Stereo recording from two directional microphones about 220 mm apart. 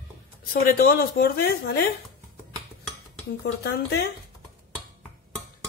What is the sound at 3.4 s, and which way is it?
Speech, 50° left (ahead or behind).